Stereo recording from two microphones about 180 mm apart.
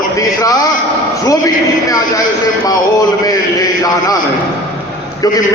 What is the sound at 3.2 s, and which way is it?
Speech, 20° left (ahead or behind).